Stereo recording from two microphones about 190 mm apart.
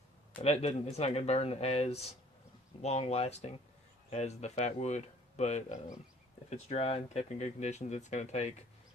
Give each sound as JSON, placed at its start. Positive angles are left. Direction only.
{"t": 0.4, "sound": "speech", "side_deg": 35}